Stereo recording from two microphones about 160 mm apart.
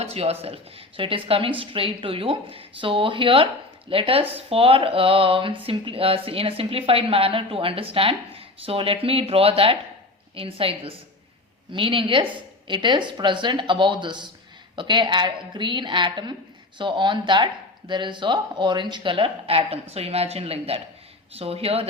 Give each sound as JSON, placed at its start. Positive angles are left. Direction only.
{"t": 0.0, "sound": "speech", "side_deg": -40}